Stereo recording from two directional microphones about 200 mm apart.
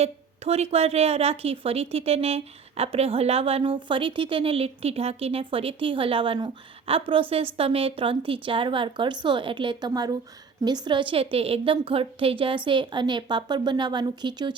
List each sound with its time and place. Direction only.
0.0 s a woman's voice: 30° right (ahead or behind)